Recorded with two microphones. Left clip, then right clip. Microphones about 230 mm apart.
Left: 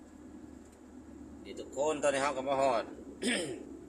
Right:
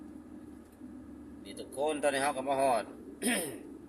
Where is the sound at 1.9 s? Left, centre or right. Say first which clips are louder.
Even; right.